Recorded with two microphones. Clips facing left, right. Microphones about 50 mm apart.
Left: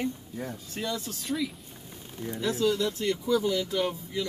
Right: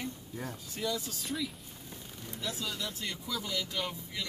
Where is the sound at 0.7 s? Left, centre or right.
Left.